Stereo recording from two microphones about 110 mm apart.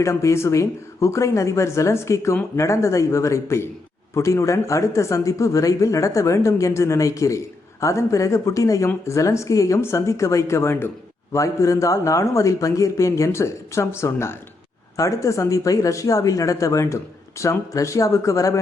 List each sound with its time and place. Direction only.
0.0 s speech: 25° left (ahead or behind)